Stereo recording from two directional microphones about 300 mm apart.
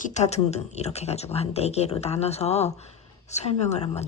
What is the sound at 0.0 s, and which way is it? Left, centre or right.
Speech, left.